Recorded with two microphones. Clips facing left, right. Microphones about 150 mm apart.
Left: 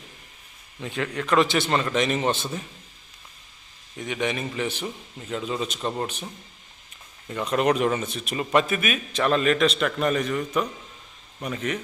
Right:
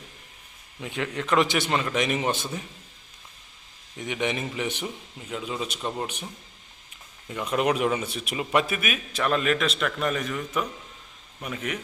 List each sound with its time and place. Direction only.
0.8 s a man's voice: 15° right (ahead or behind)
3.9 s a man's voice: 20° right (ahead or behind)
5.3 s a man's voice: 5° right (ahead or behind)
7.3 s a man's voice: 5° right (ahead or behind)